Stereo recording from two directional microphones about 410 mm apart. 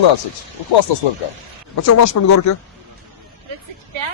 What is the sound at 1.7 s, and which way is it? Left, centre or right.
Speech, left.